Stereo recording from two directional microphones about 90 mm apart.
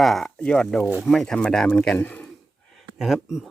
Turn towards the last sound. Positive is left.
turn(degrees=-5)  # may be behind; listen again after turning